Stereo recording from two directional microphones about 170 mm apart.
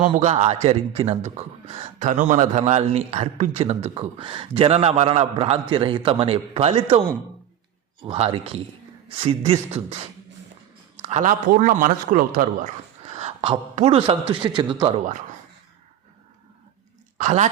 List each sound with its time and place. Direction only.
0.2 s a man's voice: 40° right (ahead or behind)
2.0 s a man's voice: 45° right (ahead or behind)
8.0 s a man's voice: 30° right (ahead or behind)
11.0 s a man's voice: 45° right (ahead or behind)
13.1 s a man's voice: 40° right (ahead or behind)
17.2 s a man's voice: 45° right (ahead or behind)